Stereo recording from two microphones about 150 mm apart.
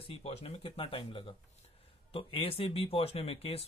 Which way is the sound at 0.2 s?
45° left (ahead or behind).